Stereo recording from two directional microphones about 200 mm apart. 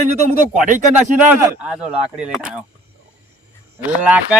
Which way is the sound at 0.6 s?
40° right (ahead or behind).